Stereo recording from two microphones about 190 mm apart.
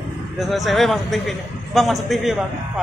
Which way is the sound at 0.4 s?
Centre (ahead or behind).